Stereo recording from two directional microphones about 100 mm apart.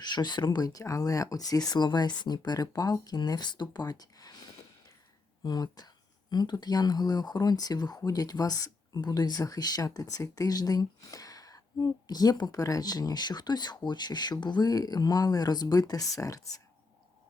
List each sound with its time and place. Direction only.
0.0 s speech: 45° left (ahead or behind)